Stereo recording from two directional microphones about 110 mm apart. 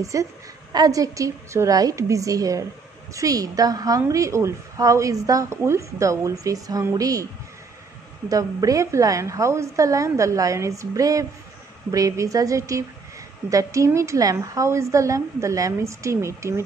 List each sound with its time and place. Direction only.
0.0 s a woman's voice: 30° right (ahead or behind)
8.3 s a woman's voice: 30° right (ahead or behind)